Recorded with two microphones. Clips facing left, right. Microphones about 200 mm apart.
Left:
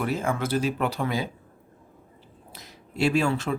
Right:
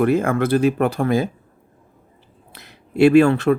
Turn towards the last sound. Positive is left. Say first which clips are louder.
# right 11 dB
turn(degrees=-60)  # may be behind; listen again after turning